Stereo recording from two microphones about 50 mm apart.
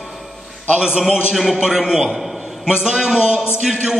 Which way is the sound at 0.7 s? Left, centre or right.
Centre.